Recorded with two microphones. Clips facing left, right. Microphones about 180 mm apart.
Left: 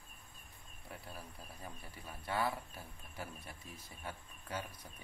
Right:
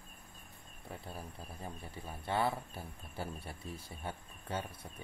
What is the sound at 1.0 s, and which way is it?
Speech, 25° right (ahead or behind).